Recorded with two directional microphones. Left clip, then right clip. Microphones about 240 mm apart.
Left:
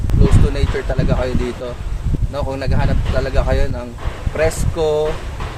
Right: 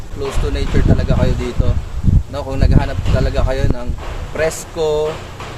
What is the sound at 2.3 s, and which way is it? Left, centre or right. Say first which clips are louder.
Speech: right 1 dB; centre.